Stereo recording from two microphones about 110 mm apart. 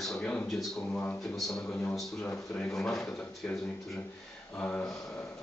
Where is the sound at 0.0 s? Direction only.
5° left (ahead or behind).